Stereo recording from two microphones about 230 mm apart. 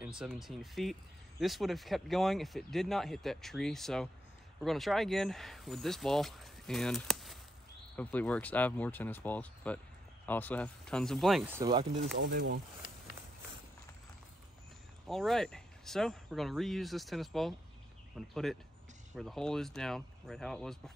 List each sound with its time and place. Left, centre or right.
0.0 s speech: centre
12.2 s speech: right
15.0 s speech: centre